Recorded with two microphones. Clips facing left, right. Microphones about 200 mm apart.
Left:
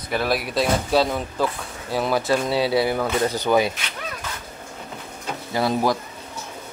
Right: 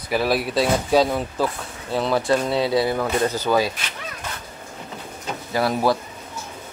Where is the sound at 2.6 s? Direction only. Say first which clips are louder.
Even; 20° left (ahead or behind).